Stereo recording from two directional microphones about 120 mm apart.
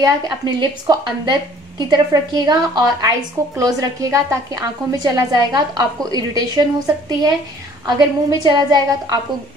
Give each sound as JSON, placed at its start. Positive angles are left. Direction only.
{"t": 0.0, "sound": "a woman's voice", "side_deg": -35}
{"t": 7.8, "sound": "a woman's voice", "side_deg": -35}